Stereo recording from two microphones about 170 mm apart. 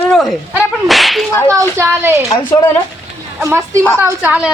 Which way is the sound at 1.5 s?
15° right (ahead or behind).